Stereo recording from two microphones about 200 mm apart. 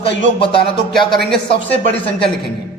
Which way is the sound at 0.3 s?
25° left (ahead or behind).